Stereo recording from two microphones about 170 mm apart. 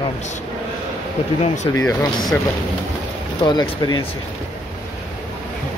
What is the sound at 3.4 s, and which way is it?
Speech, 25° left (ahead or behind).